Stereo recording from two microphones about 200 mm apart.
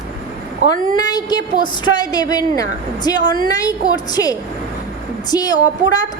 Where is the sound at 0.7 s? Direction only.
20° left (ahead or behind).